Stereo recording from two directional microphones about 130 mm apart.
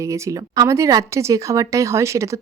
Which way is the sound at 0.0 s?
25° right (ahead or behind).